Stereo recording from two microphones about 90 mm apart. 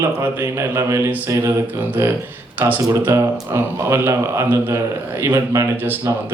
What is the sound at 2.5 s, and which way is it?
A man's voice, 20° right (ahead or behind).